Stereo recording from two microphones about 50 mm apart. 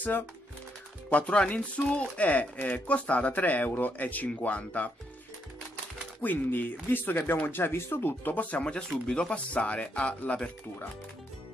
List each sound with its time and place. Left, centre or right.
1.1 s speech: left
6.2 s speech: left